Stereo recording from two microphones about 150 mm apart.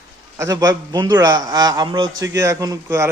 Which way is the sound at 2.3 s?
20° right (ahead or behind).